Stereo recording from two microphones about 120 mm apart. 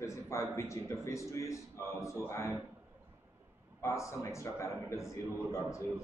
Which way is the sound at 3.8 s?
25° left (ahead or behind).